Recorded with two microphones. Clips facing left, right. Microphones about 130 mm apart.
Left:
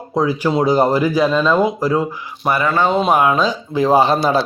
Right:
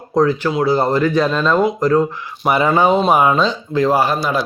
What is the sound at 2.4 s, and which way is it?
A man's voice, 15° right (ahead or behind).